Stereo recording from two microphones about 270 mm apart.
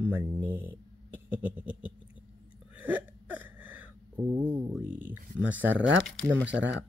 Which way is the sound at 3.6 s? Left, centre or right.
Centre.